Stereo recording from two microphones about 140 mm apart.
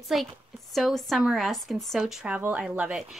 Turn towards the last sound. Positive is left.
turn(degrees=-5)  # may be behind; listen again after turning